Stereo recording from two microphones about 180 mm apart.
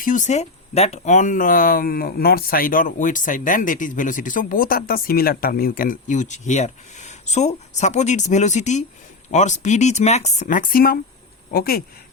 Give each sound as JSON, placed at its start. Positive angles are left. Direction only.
{"t": 0.0, "sound": "speech", "side_deg": 45}